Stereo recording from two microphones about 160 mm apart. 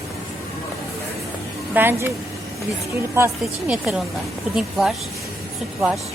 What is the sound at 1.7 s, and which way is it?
Speech, 15° right (ahead or behind).